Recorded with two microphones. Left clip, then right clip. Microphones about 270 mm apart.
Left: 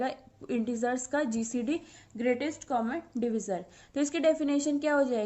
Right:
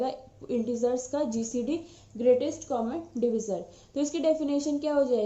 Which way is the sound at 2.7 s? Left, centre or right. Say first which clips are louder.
Left 1 dB; left.